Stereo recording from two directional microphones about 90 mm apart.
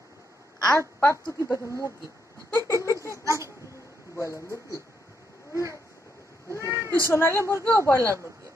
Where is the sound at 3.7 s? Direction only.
35° left (ahead or behind).